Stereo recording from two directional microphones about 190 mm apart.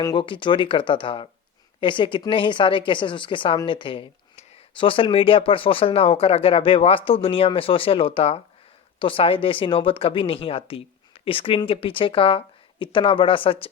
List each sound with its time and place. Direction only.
0.0 s a woman's voice: 25° left (ahead or behind)